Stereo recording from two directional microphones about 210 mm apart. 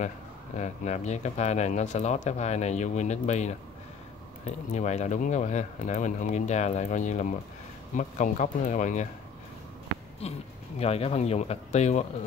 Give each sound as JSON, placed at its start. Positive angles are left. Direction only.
{"t": 0.6, "sound": "speech", "side_deg": 35}
{"t": 10.2, "sound": "speech", "side_deg": 30}